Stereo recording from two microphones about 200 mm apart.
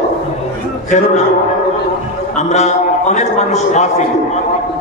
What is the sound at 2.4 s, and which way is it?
Speech, 35° left (ahead or behind).